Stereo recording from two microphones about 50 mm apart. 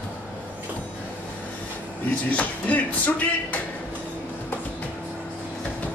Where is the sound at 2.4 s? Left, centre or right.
Left.